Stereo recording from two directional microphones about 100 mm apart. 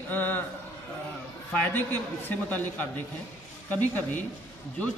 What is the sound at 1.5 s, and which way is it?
A man's voice, 15° left (ahead or behind).